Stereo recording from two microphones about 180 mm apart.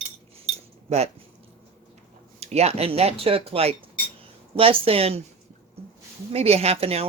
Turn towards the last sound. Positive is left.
turn(degrees=-35)  # may be behind; listen again after turning